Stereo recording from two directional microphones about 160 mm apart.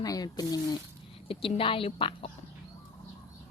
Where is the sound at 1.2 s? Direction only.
35° left (ahead or behind).